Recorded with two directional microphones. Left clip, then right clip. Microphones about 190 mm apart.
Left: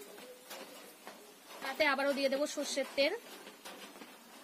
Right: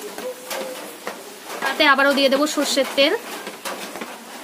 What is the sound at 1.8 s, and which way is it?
A woman's voice, 15° left (ahead or behind).